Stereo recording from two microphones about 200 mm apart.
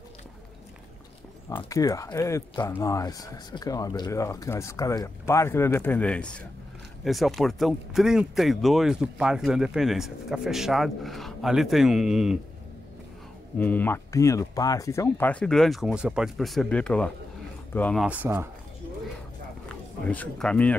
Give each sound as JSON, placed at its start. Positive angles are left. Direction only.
{"t": 1.6, "sound": "speech", "side_deg": 15}
{"t": 13.6, "sound": "speech", "side_deg": 10}
{"t": 18.0, "sound": "speech", "side_deg": -10}
{"t": 20.1, "sound": "speech", "side_deg": 5}